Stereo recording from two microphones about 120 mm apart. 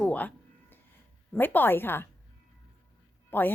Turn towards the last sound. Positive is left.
turn(degrees=15)  # may be behind; listen again after turning